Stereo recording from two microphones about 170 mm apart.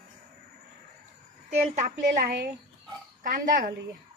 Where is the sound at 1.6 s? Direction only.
50° right (ahead or behind).